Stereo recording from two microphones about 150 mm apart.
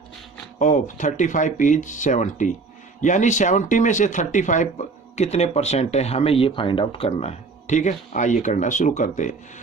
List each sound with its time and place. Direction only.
0.6 s speech: 55° left (ahead or behind)